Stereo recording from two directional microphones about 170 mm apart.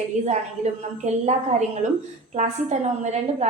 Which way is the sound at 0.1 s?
45° right (ahead or behind).